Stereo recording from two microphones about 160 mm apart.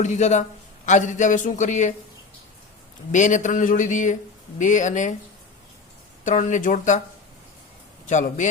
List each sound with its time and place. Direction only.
0.0 s speech: 45° left (ahead or behind)
3.1 s speech: 50° left (ahead or behind)
6.2 s speech: 50° left (ahead or behind)
8.0 s a man's voice: 50° left (ahead or behind)